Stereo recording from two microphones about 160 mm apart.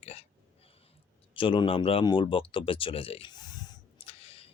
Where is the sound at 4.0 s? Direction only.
35° left (ahead or behind).